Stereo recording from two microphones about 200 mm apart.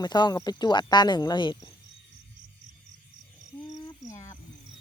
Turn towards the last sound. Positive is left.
turn(degrees=15)  # may be behind; listen again after turning